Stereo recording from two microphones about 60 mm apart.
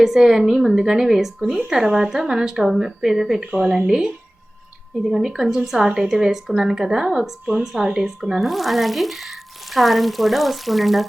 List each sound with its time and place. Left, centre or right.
0.0 s a woman's voice: centre